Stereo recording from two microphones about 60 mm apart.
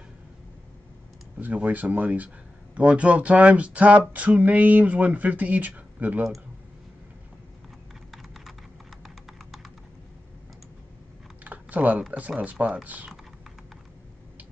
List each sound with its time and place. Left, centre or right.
1.4 s speech: right
8.1 s computer keyboard: centre
9.0 s a sound: centre
11.4 s typing: right
12.1 s speech: right